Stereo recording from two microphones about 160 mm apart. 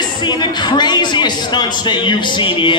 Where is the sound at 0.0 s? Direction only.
25° left (ahead or behind).